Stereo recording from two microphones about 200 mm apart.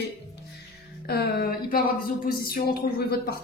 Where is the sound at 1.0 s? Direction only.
50° left (ahead or behind).